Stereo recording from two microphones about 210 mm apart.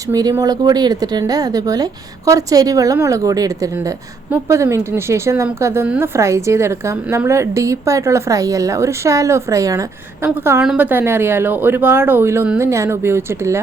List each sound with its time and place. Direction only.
0.1 s speech: 15° right (ahead or behind)